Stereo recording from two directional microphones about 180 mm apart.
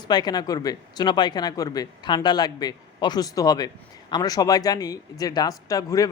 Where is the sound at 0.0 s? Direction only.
25° left (ahead or behind).